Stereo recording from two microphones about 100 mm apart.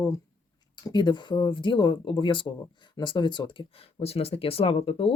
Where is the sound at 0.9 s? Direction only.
50° left (ahead or behind).